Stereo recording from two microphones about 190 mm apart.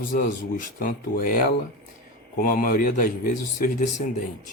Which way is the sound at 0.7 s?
50° left (ahead or behind).